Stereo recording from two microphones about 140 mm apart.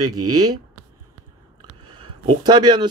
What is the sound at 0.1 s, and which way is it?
Speech, 25° right (ahead or behind).